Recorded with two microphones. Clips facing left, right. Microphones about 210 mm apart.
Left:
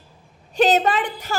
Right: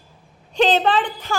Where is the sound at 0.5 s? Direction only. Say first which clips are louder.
Even; 10° left (ahead or behind).